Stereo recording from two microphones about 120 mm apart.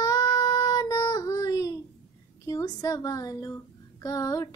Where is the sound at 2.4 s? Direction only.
30° left (ahead or behind).